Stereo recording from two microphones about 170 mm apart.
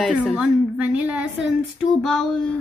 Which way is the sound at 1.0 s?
10° right (ahead or behind).